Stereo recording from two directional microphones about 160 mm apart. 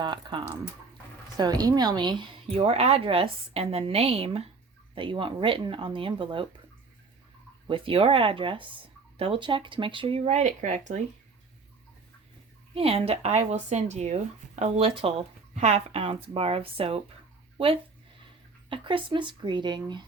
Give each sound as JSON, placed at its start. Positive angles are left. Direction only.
{"t": 0.0, "sound": "speech", "side_deg": -30}
{"t": 7.7, "sound": "speech", "side_deg": -35}
{"t": 12.7, "sound": "speech", "side_deg": -40}